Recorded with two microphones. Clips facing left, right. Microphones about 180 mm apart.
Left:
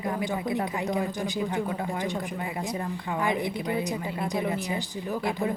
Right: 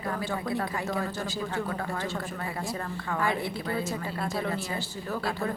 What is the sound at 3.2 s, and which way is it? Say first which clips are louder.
A woman's voice: left 2 dB; 15° left (ahead or behind).